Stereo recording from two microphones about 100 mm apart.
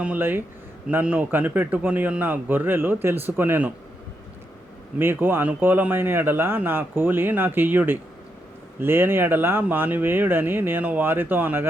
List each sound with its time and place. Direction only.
0.0 s speech: 15° right (ahead or behind)
4.9 s speech: 20° right (ahead or behind)